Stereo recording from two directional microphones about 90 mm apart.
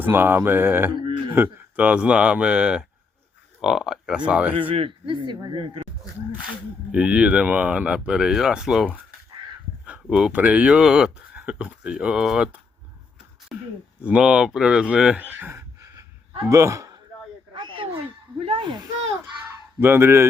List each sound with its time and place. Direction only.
0.0 s speech: 25° right (ahead or behind)
4.7 s speech: 80° right; by 5.8 s 65° right (ahead or behind)
6.9 s speech: 10° right (ahead or behind)
9.8 s a sound: 10° right (ahead or behind)
10.3 s speech: 15° right (ahead or behind)
13.5 s a sound: 5° right (ahead or behind)
14.0 s speech: 10° right (ahead or behind)
15.2 s speech: 20° right (ahead or behind)
16.5 s speech: 35° right (ahead or behind)
17.5 s a sound: 70° right (ahead or behind)
18.3 s speech: 90° right
19.8 s speech: 25° right (ahead or behind)